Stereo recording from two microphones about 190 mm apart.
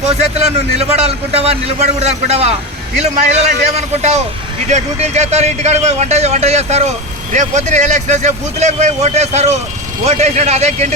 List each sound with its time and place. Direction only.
0.3 s speech: 35° right (ahead or behind)